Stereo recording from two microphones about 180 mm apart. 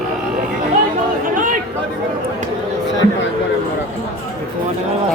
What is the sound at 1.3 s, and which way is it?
Chatter, 45° right (ahead or behind).